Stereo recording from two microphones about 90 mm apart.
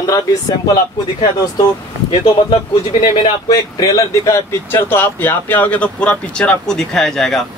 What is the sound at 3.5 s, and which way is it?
Speech, 40° left (ahead or behind).